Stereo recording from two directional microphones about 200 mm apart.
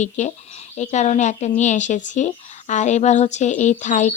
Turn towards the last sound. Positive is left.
turn(degrees=35)  # may be behind; listen again after turning